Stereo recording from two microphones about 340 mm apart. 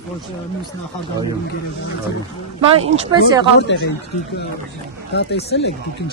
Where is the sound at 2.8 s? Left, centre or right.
Centre.